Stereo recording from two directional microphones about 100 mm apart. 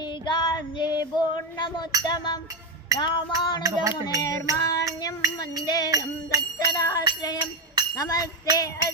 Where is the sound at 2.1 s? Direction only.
50° left (ahead or behind).